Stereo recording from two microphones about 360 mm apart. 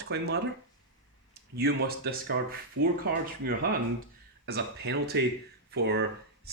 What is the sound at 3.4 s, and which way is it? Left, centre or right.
Speech, right.